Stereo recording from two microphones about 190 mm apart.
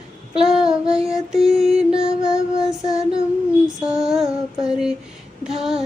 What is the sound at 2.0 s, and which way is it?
Music, 5° right (ahead or behind).